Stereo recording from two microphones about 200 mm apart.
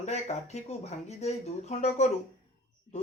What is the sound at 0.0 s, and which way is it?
Speech, 35° left (ahead or behind).